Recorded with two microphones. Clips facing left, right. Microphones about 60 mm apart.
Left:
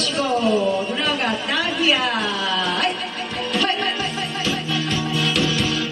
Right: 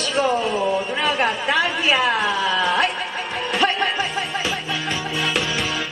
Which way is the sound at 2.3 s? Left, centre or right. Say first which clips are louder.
Right 3 dB; centre.